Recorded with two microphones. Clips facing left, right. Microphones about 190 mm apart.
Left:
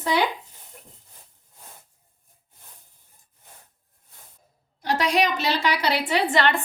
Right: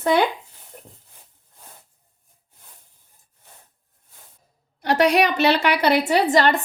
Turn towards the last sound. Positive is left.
turn(degrees=-40)  # may be behind; listen again after turning